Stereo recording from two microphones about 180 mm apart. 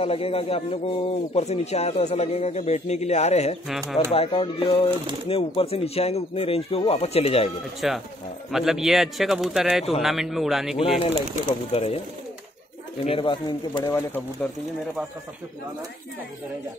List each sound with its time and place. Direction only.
0.0 s speech: 30° left (ahead or behind)
3.6 s a man's voice: centre (ahead or behind)
4.1 s speech: 30° left (ahead or behind)
7.8 s a man's voice: centre (ahead or behind)
11.7 s speech: 35° left (ahead or behind)
13.0 s speech: 30° left (ahead or behind); by 14.5 s 10° left (ahead or behind)